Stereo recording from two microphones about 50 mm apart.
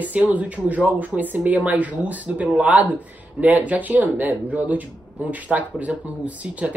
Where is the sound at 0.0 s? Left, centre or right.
Right.